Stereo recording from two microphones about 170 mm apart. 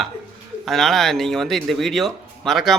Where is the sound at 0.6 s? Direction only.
Centre (ahead or behind).